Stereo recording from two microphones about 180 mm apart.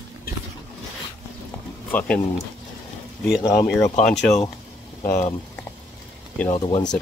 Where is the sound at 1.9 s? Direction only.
10° left (ahead or behind).